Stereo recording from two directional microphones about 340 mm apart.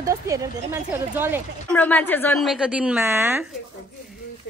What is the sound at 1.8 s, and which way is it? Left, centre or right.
A woman's voice, centre.